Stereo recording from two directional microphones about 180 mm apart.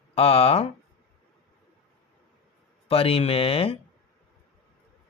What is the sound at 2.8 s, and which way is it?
Speech, 30° left (ahead or behind).